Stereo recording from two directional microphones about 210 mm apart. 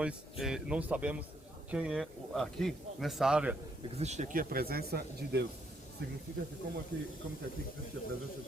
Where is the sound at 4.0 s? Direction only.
35° right (ahead or behind); by 5.5 s 50° right (ahead or behind).